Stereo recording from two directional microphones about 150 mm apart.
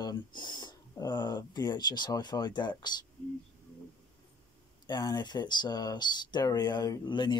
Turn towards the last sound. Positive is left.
turn(degrees=30)  # may be behind; listen again after turning